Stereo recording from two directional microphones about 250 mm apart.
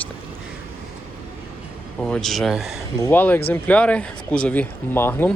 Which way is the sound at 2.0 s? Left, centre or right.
Centre.